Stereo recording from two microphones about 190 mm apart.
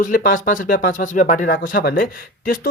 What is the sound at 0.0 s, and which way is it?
Speech, 45° left (ahead or behind).